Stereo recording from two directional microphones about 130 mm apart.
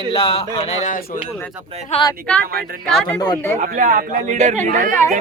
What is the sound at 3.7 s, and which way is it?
Speech, 90° right.